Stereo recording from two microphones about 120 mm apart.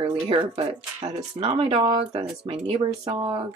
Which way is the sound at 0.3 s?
55° right (ahead or behind).